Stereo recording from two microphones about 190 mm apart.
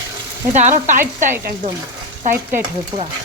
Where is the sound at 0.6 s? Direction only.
40° right (ahead or behind).